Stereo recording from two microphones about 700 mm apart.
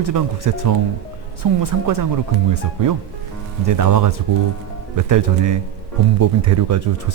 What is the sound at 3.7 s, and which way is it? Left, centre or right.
Speech, right.